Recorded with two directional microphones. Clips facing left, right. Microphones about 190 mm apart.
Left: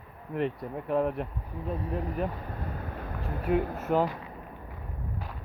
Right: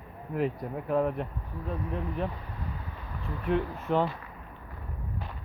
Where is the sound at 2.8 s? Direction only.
55° left (ahead or behind).